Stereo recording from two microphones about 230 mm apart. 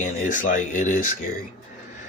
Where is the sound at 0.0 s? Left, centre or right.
Left.